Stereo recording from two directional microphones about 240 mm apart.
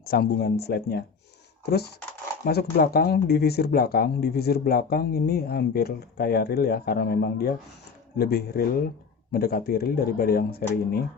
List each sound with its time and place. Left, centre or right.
0.0 s speech: left
2.4 s speech: left